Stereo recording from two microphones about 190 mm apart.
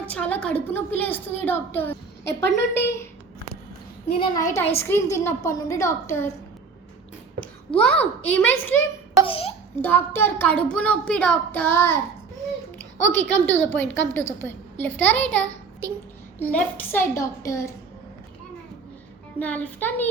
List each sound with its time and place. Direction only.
0.0 s speech: 5° left (ahead or behind)
2.2 s a woman's voice: 65° left (ahead or behind)
4.8 s speech: 10° left (ahead or behind)
7.7 s speech: 5° left (ahead or behind)
9.2 s a sound: 30° left (ahead or behind)
9.8 s speech: 10° left (ahead or behind)
12.8 s a sound: 10° left (ahead or behind)
13.3 s speech: 10° left (ahead or behind)
15.8 s child singing: 15° right (ahead or behind)
16.4 s speech: 10° left (ahead or behind)
19.4 s speech: 10° left (ahead or behind)